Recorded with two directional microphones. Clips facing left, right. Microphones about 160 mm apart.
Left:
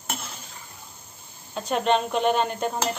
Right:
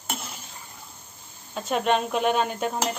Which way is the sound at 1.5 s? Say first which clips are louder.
Left 1 dB; centre (ahead or behind).